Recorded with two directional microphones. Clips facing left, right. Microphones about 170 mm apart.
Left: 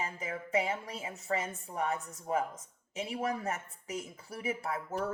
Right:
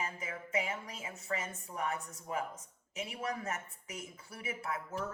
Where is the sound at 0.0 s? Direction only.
30° left (ahead or behind).